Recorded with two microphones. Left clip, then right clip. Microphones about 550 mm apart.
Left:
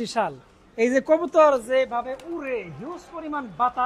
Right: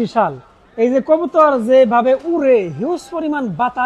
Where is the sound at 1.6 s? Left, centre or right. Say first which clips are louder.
Right 13 dB; right.